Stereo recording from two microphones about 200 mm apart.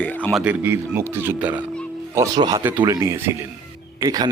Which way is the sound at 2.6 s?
10° right (ahead or behind).